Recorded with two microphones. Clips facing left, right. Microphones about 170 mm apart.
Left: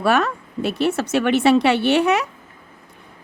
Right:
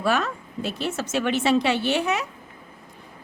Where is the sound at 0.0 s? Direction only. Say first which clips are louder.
Left 5 dB; 65° left (ahead or behind).